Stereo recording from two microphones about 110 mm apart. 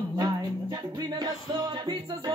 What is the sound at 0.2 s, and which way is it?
Music, 40° right (ahead or behind).